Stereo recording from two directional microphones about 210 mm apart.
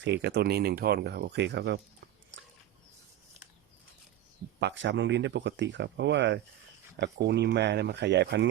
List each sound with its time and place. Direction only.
0.0 s speech: 55° right (ahead or behind)
2.3 s a sound: 60° right (ahead or behind)
4.6 s speech: 60° right (ahead or behind)